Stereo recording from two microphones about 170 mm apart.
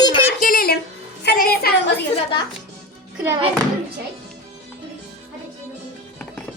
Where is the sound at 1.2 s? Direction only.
70° left (ahead or behind).